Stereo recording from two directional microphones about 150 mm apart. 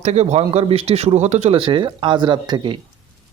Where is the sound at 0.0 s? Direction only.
45° right (ahead or behind).